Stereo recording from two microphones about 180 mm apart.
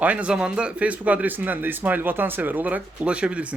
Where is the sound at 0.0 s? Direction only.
5° right (ahead or behind).